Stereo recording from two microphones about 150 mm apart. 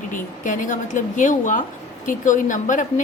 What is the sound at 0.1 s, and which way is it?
A woman's voice, 60° left (ahead or behind).